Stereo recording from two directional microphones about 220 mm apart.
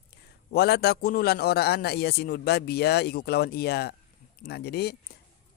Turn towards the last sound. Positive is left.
turn(degrees=45)  # may be behind; listen again after turning